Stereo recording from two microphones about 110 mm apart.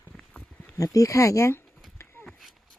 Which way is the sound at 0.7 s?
30° left (ahead or behind).